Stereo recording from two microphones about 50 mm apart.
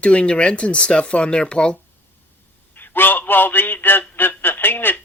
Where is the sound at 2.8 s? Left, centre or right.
Left.